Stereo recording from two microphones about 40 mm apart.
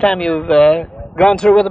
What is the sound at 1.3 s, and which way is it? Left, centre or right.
Speech, centre.